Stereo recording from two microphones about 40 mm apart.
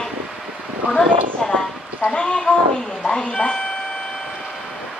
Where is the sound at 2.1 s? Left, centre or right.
Left.